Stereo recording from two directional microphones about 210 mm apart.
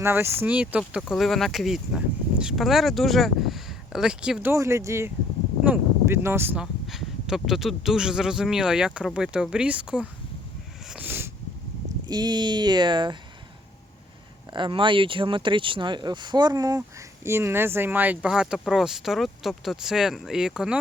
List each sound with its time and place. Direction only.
0.0 s speech: 10° right (ahead or behind)
10.9 s a sound: 10° right (ahead or behind)
12.0 s speech: 20° right (ahead or behind)
14.5 s speech: 25° right (ahead or behind); by 20.7 s 5° right (ahead or behind)